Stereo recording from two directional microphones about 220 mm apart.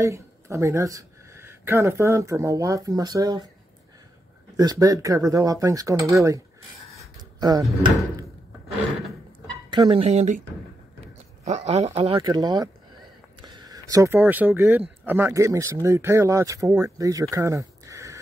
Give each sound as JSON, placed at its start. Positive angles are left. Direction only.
{"t": 0.0, "sound": "speech", "side_deg": -15}
{"t": 4.6, "sound": "speech", "side_deg": -15}
{"t": 9.7, "sound": "speech", "side_deg": -20}
{"t": 10.0, "sound": "speech", "side_deg": -35}
{"t": 11.4, "sound": "speech", "side_deg": -30}